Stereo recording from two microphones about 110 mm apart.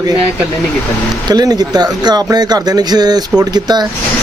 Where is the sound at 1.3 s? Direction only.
40° right (ahead or behind).